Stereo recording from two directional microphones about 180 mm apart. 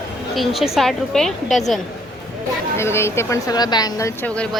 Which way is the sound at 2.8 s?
15° left (ahead or behind).